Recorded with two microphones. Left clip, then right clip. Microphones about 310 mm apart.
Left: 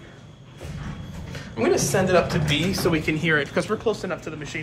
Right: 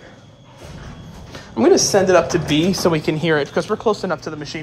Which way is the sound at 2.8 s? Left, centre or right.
Right.